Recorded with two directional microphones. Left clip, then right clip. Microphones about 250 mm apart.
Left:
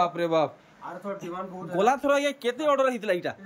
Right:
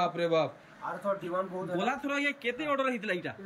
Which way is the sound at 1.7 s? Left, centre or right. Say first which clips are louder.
Left 10 dB; centre.